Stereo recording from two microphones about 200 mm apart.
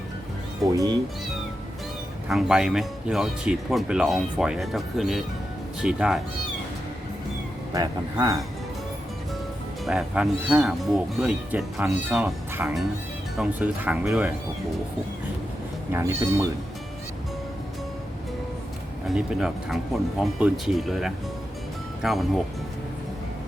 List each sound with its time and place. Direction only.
0.6 s speech: 15° right (ahead or behind)
2.2 s speech: centre (ahead or behind)
7.7 s speech: 20° right (ahead or behind)
9.8 s speech: 5° right (ahead or behind)
15.9 s speech: 15° right (ahead or behind)
19.0 s speech: centre (ahead or behind)